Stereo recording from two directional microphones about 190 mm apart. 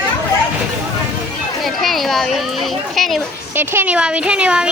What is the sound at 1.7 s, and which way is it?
Speech, centre (ahead or behind).